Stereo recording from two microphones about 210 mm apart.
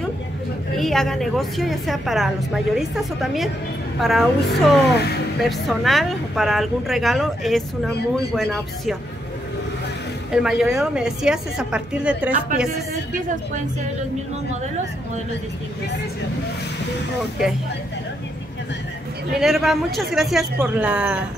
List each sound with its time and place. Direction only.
0.7 s a woman's voice: centre (ahead or behind)
4.9 s speech: 50° left (ahead or behind)
5.4 s a woman's voice: centre (ahead or behind)
10.3 s a woman's voice: 5° right (ahead or behind)
19.3 s a woman's voice: centre (ahead or behind)